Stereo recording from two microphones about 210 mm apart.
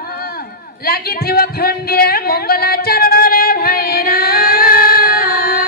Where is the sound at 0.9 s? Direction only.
45° left (ahead or behind).